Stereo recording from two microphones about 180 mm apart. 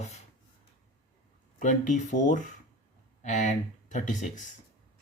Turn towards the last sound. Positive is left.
turn(degrees=45)  # may be behind; listen again after turning